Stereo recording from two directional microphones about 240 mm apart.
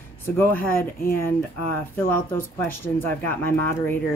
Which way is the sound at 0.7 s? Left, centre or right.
Left.